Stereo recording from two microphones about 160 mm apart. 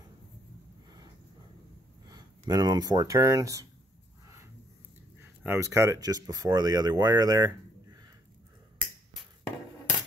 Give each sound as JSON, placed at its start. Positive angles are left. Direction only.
{"t": 2.0, "sound": "speech", "side_deg": -25}
{"t": 5.4, "sound": "speech", "side_deg": -15}